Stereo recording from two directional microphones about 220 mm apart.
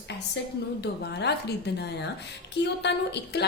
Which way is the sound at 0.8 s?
50° left (ahead or behind).